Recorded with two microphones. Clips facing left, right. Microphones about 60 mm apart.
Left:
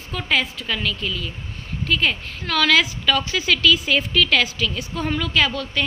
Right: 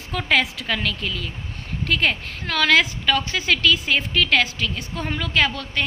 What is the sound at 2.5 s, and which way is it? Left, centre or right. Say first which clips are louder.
A woman's voice: even; right.